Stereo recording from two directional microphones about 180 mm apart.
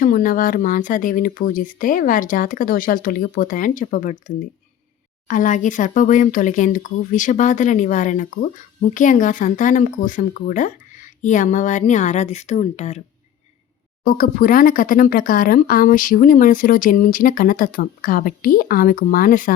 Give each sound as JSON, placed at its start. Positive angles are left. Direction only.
{"t": 0.0, "sound": "speech", "side_deg": 50}
{"t": 5.3, "sound": "speech", "side_deg": 45}
{"t": 14.0, "sound": "speech", "side_deg": 50}